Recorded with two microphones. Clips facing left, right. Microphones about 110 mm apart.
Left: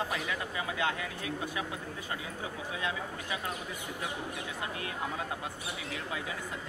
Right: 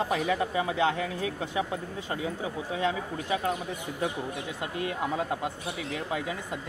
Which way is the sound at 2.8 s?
30° right (ahead or behind).